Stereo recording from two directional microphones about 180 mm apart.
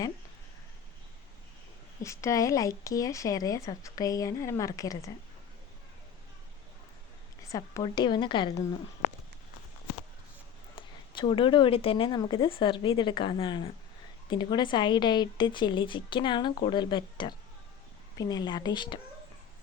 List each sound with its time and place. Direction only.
2.0 s speech: 15° left (ahead or behind)
7.5 s speech: 20° left (ahead or behind)
10.8 s speech: 30° left (ahead or behind)